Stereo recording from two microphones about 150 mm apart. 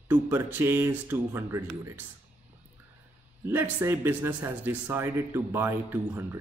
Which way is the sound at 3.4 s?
15° right (ahead or behind).